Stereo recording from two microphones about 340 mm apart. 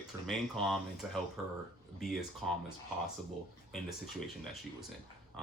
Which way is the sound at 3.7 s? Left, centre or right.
Centre.